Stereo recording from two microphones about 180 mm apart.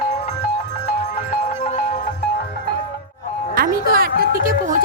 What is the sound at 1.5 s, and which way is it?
Music, 40° left (ahead or behind).